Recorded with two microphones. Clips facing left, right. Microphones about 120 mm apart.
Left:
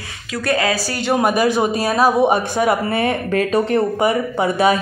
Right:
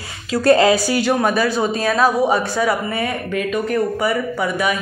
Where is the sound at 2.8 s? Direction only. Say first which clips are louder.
Left 4 dB; 35° left (ahead or behind).